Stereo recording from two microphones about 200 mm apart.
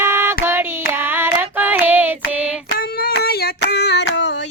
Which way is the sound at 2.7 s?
50° left (ahead or behind).